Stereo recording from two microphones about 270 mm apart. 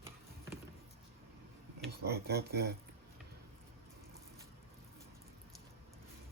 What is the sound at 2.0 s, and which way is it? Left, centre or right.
Speech, right.